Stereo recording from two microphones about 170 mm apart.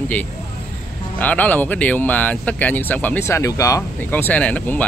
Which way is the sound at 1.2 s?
10° left (ahead or behind).